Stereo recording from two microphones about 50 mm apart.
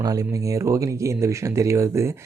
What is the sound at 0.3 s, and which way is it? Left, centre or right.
Speech, right.